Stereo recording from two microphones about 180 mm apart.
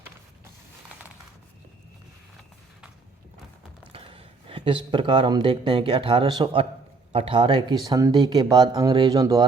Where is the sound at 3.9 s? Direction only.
30° right (ahead or behind).